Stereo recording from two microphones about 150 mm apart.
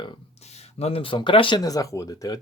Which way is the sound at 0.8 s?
40° left (ahead or behind).